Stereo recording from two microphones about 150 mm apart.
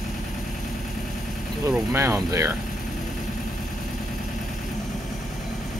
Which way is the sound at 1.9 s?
15° right (ahead or behind).